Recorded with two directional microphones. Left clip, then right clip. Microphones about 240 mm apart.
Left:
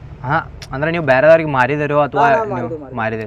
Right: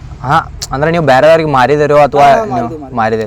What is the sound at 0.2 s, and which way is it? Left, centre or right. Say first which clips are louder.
Speech: right 7 dB; right.